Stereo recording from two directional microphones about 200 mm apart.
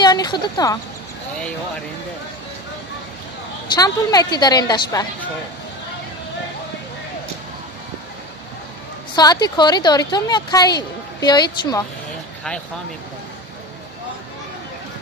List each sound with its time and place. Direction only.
0.0 s speech: 20° left (ahead or behind)
3.6 s a woman's voice: 20° left (ahead or behind)
9.1 s a woman's voice: 20° left (ahead or behind)